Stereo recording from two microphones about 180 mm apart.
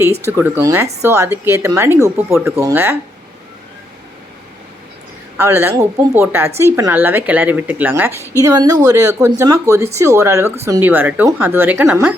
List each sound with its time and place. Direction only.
0.3 s speech: 10° right (ahead or behind)
5.4 s speech: 15° right (ahead or behind)